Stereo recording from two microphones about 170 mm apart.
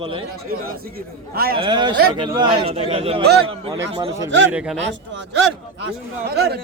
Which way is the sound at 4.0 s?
20° right (ahead or behind).